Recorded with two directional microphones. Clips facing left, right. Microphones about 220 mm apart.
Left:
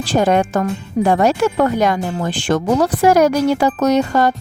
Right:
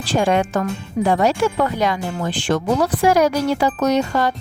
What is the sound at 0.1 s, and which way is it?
Speech, 45° left (ahead or behind).